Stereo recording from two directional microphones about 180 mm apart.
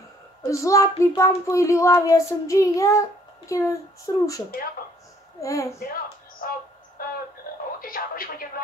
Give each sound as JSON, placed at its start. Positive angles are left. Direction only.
{"t": 0.5, "sound": "child singing", "side_deg": 15}
{"t": 5.4, "sound": "child singing", "side_deg": 20}
{"t": 6.4, "sound": "music", "side_deg": 55}
{"t": 7.0, "sound": "a sound", "side_deg": 55}
{"t": 7.8, "sound": "radio", "side_deg": 55}